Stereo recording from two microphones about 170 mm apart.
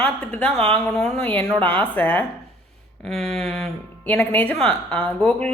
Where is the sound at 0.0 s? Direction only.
5° left (ahead or behind).